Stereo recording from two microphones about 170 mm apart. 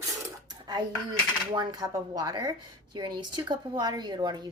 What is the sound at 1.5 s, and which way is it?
Speech, 25° right (ahead or behind).